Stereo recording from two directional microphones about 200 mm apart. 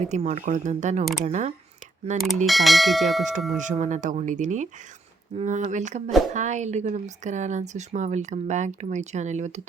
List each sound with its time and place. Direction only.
0.1 s a woman's voice: 35° right (ahead or behind)
2.5 s speech: centre (ahead or behind)
3.6 s a woman's voice: 40° right (ahead or behind)